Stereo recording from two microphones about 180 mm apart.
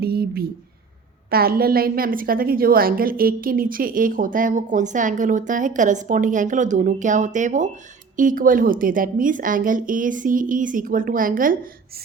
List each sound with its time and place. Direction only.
0.0 s a woman's voice: 60° right (ahead or behind)